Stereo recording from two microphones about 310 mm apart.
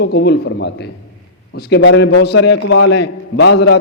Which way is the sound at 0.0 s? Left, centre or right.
Left.